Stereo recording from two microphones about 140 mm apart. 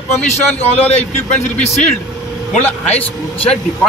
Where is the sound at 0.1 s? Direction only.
50° left (ahead or behind).